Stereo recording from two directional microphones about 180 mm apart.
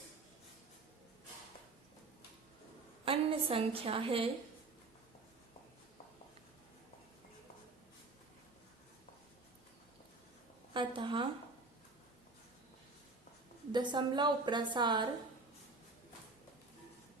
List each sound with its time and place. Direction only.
3.0 s a woman's voice: 30° right (ahead or behind)
10.8 s a woman's voice: 25° right (ahead or behind)
13.7 s a woman's voice: 25° right (ahead or behind)